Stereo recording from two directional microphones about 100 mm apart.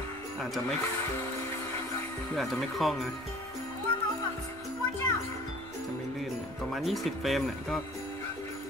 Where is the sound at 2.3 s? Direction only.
Centre (ahead or behind).